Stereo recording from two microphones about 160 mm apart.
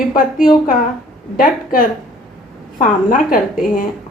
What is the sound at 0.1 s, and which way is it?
A woman's voice, 60° left (ahead or behind).